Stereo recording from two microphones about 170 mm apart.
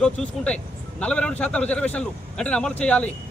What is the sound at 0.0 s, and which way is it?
A man's voice, 5° left (ahead or behind).